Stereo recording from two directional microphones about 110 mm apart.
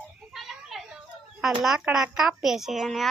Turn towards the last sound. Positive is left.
turn(degrees=0)  # may be behind; listen again after turning